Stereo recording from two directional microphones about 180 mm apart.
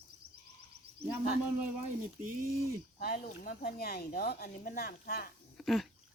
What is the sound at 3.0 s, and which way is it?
Speech, 55° left (ahead or behind).